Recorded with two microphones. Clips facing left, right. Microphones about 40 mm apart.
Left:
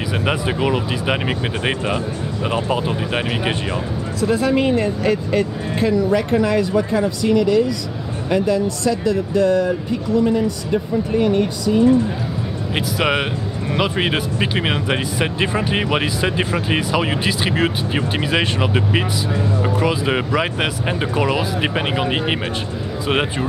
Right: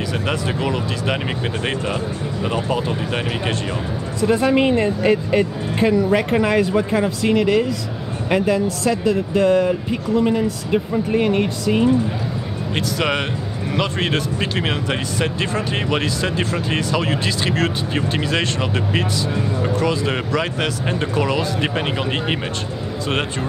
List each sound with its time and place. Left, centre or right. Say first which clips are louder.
0.1 s speech: left 5 dB; centre
4.2 s speech: right 1 dB; centre
8.3 s speech: even; centre
11.7 s speech: left 2 dB; right
12.7 s speech: left 2 dB; centre